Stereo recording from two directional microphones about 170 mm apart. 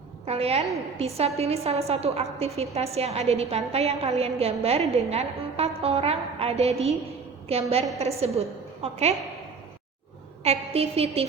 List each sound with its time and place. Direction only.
0.3 s a woman's voice: 35° right (ahead or behind)
10.4 s a woman's voice: 35° right (ahead or behind)